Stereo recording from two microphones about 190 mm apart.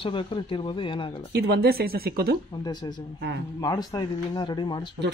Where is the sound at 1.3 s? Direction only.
60° right (ahead or behind).